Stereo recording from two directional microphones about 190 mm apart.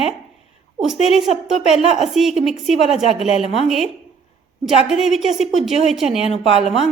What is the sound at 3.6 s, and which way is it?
A woman's voice, centre (ahead or behind).